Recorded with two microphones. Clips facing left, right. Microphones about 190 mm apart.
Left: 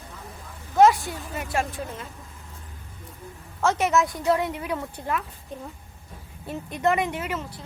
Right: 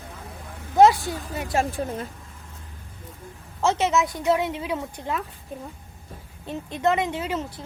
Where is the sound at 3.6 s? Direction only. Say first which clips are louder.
Even; 20° right (ahead or behind).